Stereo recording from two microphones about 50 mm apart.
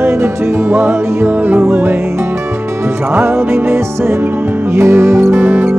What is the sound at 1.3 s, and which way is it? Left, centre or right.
Music, right.